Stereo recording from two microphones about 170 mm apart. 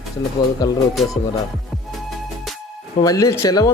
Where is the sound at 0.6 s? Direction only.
20° left (ahead or behind).